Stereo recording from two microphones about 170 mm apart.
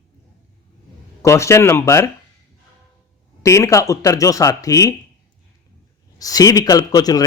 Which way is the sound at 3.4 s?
15° left (ahead or behind).